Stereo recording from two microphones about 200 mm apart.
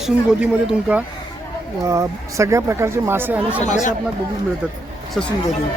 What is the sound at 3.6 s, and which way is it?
Speech, 35° left (ahead or behind).